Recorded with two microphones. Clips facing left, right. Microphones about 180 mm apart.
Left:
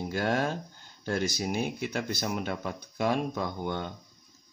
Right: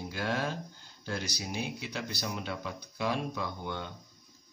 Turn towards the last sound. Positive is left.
turn(degrees=45)  # may be behind; listen again after turning